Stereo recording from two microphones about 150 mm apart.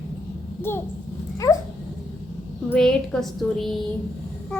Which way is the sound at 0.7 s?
15° left (ahead or behind).